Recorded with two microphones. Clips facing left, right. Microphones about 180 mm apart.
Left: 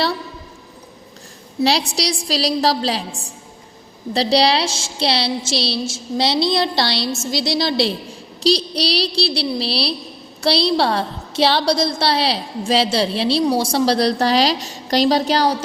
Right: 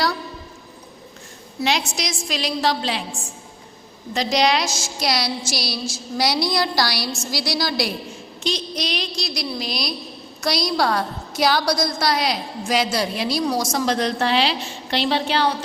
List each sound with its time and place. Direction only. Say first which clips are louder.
1.6 s a woman's voice: left 5 dB; 35° left (ahead or behind)
4.1 s a woman's voice: left 3 dB; 35° left (ahead or behind)